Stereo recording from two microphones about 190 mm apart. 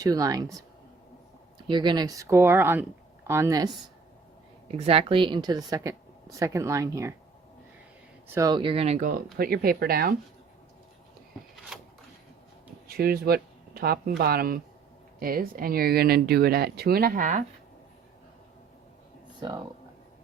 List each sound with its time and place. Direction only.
0.0 s speech: 20° right (ahead or behind)
1.6 s speech: 25° right (ahead or behind)
4.7 s a woman's voice: 30° right (ahead or behind)
8.3 s speech: 20° right (ahead or behind); by 10.2 s 50° right (ahead or behind)
11.7 s a sound: 5° right (ahead or behind)
12.9 s speech: 50° right (ahead or behind)
19.4 s speech: 20° right (ahead or behind)